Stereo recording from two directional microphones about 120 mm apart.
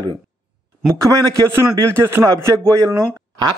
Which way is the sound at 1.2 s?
25° right (ahead or behind).